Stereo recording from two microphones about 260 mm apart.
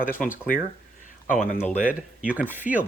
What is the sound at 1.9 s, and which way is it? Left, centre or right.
Speech, centre.